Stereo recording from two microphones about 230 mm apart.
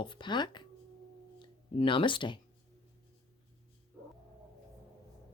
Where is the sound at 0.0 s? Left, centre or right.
Centre.